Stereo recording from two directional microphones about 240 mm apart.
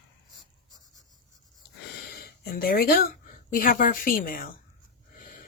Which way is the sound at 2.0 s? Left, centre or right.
Left.